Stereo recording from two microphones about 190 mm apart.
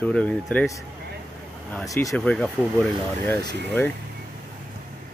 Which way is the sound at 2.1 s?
Centre (ahead or behind).